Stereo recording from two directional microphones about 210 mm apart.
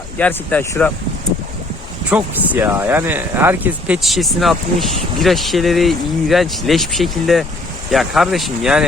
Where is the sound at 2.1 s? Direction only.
5° right (ahead or behind).